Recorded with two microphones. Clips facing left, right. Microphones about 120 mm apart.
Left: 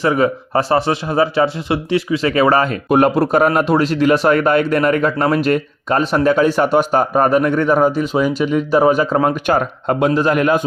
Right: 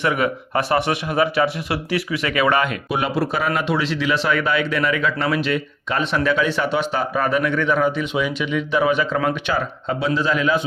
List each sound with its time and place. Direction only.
0.0 s speech: 30° left (ahead or behind); by 10.7 s 50° left (ahead or behind)